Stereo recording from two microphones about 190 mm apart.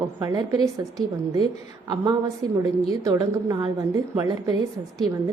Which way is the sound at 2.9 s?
15° right (ahead or behind).